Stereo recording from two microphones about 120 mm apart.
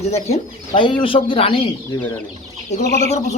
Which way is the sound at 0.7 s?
45° left (ahead or behind).